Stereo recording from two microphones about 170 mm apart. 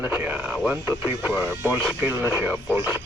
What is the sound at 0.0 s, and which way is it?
Speech, 10° right (ahead or behind).